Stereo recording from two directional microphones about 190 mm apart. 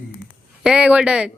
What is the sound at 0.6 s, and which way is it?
Speech, 5° right (ahead or behind).